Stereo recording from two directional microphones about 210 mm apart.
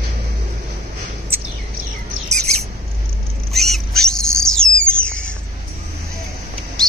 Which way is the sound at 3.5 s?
Centre (ahead or behind).